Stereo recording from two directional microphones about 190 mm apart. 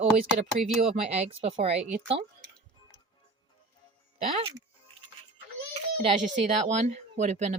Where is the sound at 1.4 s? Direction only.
30° right (ahead or behind).